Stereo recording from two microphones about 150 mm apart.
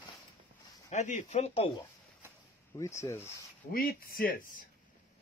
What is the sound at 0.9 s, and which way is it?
Speech, 50° left (ahead or behind).